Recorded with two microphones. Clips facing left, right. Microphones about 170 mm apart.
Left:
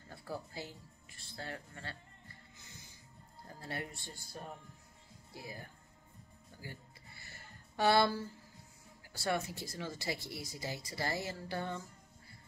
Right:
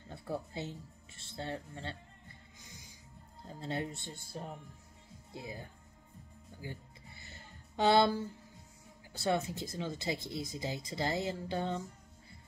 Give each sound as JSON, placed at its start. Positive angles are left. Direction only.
{"t": 0.1, "sound": "speech", "side_deg": -25}
{"t": 3.4, "sound": "speech", "side_deg": -20}
{"t": 6.6, "sound": "music", "side_deg": -20}
{"t": 9.1, "sound": "speech", "side_deg": -20}